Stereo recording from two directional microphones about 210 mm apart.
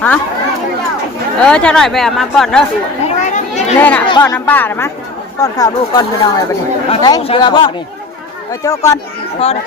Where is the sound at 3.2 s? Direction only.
35° left (ahead or behind).